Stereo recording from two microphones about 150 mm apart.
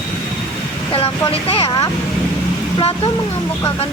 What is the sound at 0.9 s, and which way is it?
Speech, 40° left (ahead or behind).